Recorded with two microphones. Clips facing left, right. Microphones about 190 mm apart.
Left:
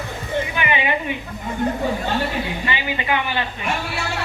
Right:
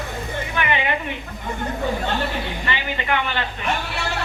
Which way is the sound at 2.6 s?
15° left (ahead or behind).